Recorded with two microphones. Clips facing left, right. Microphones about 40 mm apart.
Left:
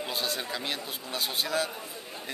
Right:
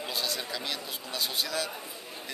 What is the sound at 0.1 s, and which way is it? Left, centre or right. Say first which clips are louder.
A man's voice: even; left.